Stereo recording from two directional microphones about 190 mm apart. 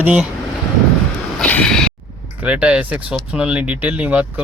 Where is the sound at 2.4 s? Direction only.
5° right (ahead or behind).